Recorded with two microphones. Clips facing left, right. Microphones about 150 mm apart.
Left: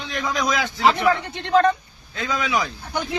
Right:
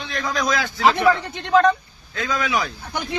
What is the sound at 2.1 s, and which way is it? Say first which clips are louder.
Speech: right 1 dB; 20° left (ahead or behind).